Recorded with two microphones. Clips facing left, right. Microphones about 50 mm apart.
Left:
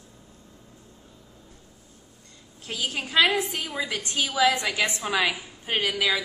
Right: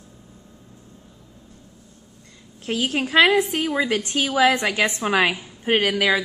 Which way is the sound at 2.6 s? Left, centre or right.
Right.